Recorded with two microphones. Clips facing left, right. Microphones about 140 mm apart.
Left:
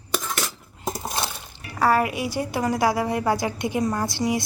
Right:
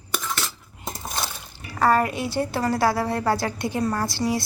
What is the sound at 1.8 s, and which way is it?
A woman's voice, 10° left (ahead or behind).